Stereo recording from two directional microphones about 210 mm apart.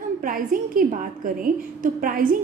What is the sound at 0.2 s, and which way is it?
A woman's voice, 40° right (ahead or behind).